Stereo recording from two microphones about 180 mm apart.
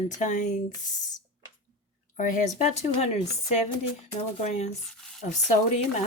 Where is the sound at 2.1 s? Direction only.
45° left (ahead or behind).